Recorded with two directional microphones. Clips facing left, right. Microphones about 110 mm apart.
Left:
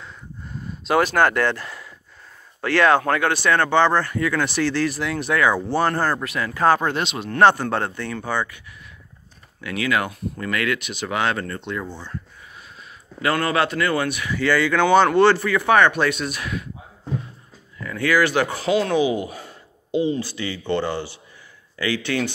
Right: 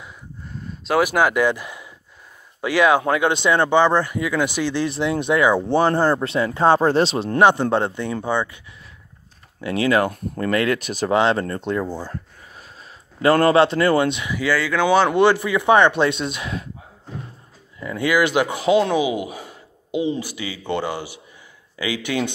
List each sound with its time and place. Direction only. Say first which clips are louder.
0.7 s a sound: even; centre (ahead or behind)
1.0 s speech: right 1 dB; 10° right (ahead or behind); by 7.3 s 30° right (ahead or behind)
7.3 s speech: right 1 dB; 15° right (ahead or behind)
9.6 s speech: right 5 dB; 30° right (ahead or behind)
10.0 s speech: right 5 dB; 45° right (ahead or behind)
11.1 s speech: right 5 dB; 30° right (ahead or behind)
13.2 s speech: right 6 dB; 35° right (ahead or behind)
14.3 s speech: left 1 dB; 5° right (ahead or behind); by 16.6 s 25° right (ahead or behind)
17.7 s speech: right 1 dB; 20° right (ahead or behind)